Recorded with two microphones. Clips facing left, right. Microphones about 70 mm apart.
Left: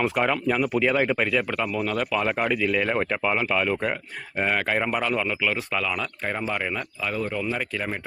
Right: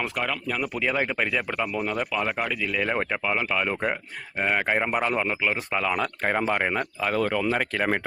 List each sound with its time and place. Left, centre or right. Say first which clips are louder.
0.6 s speech: left 2 dB; centre
2.1 s speech: left 3 dB; centre
3.7 s speech: left 1 dB; centre
5.8 s speech: right 3 dB; right
7.3 s speech: right 3 dB; right